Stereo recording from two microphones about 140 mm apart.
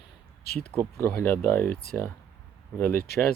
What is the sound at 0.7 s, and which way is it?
Speech, 10° left (ahead or behind).